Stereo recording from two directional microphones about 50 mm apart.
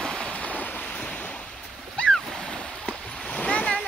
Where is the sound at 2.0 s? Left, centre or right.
Centre.